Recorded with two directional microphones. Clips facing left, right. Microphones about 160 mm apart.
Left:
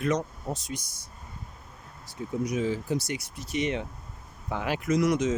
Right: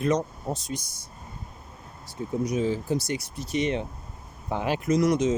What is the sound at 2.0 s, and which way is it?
Speech, 35° right (ahead or behind).